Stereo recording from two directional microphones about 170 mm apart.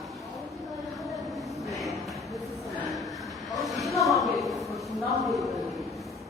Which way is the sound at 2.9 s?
Centre (ahead or behind).